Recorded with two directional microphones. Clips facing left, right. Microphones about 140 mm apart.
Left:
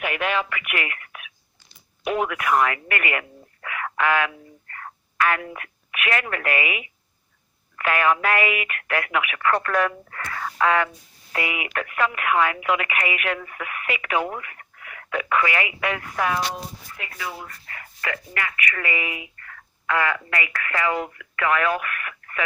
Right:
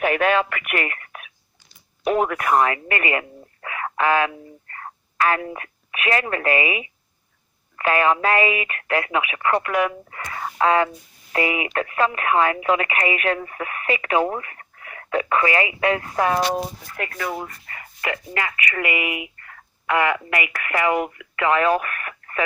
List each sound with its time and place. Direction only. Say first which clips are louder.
0.0 s speech: right 6 dB; 40° right (ahead or behind)
16.5 s speech: right 8 dB; 55° right (ahead or behind)
17.7 s speech: right 1 dB; centre (ahead or behind)
18.0 s speech: right 3 dB; 25° right (ahead or behind)